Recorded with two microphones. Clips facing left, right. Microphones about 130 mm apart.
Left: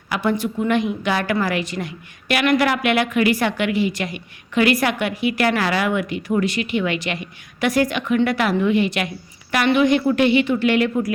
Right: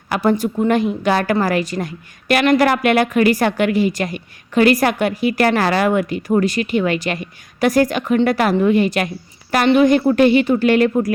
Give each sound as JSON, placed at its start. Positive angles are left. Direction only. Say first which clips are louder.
{"t": 0.1, "sound": "a woman's voice", "louder": "right 4 dB", "side_deg": -40}